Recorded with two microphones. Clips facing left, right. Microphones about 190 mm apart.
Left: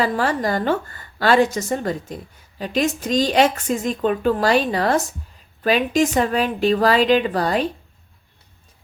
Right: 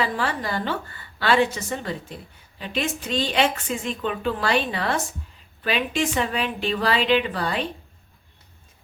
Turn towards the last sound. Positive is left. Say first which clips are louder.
# left 5 dB
turn(degrees=40)  # may be behind; listen again after turning